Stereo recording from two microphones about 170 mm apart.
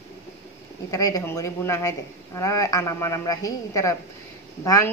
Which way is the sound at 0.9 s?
20° left (ahead or behind).